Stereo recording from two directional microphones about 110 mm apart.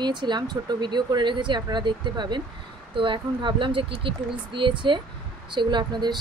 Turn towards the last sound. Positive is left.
turn(degrees=-40)  # may be behind; listen again after turning